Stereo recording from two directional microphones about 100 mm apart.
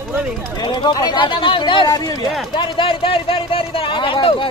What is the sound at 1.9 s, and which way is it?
Speech, 40° left (ahead or behind).